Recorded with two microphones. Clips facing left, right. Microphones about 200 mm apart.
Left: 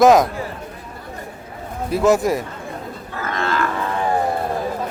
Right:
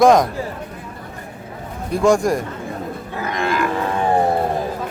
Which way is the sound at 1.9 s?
5° left (ahead or behind).